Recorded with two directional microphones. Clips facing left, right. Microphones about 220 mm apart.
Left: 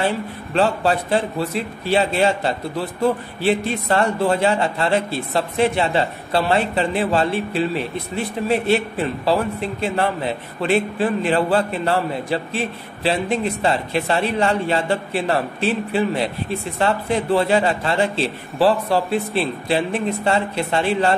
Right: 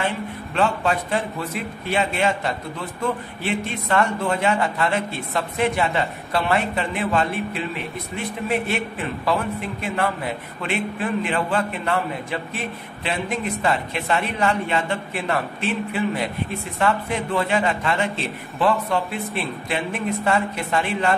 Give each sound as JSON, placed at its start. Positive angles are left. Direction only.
{"t": 0.6, "sound": "a man's voice", "side_deg": 35}